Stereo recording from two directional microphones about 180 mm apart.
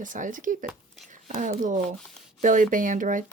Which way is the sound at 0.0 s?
45° right (ahead or behind).